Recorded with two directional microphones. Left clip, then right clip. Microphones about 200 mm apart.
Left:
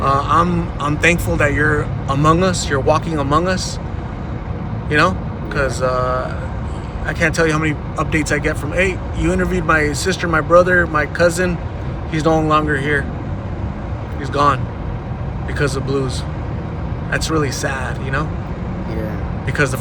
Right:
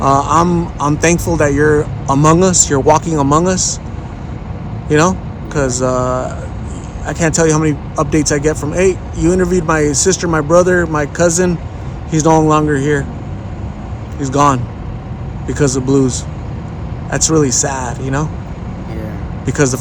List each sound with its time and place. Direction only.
0.0 s speech: 35° right (ahead or behind)
4.9 s speech: 35° right (ahead or behind)
14.2 s speech: 40° right (ahead or behind)
19.5 s speech: 35° right (ahead or behind)